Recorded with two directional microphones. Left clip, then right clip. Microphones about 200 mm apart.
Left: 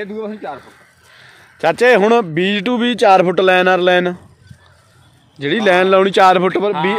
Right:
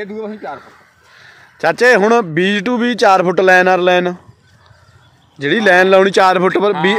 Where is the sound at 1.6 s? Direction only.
Centre (ahead or behind).